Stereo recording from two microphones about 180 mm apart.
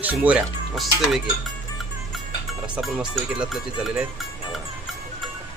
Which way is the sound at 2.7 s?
5° right (ahead or behind).